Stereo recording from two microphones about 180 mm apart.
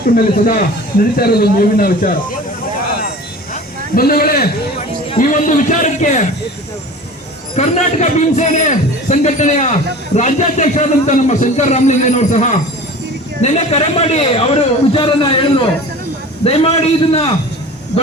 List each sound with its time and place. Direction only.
0.0 s speech: 55° left (ahead or behind)
3.5 s a sound: 55° left (ahead or behind)
5.2 s a man's voice: 45° left (ahead or behind)
7.5 s a man's voice: 40° left (ahead or behind)